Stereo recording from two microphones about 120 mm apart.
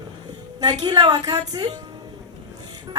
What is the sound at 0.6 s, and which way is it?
A woman's voice, 35° right (ahead or behind).